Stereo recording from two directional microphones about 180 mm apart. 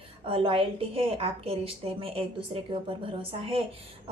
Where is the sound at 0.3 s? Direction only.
30° right (ahead or behind).